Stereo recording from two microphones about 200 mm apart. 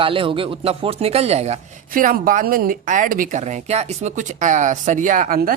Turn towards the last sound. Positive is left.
turn(degrees=-45)  # may be behind; listen again after turning